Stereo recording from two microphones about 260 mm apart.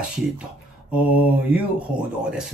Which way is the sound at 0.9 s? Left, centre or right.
Centre.